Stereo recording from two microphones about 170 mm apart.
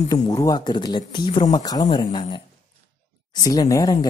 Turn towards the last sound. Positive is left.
turn(degrees=20)  # may be behind; listen again after turning